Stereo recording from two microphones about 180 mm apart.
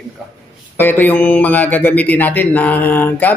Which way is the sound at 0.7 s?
10° left (ahead or behind).